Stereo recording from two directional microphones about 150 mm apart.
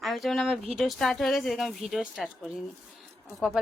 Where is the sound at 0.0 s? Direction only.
Centre (ahead or behind).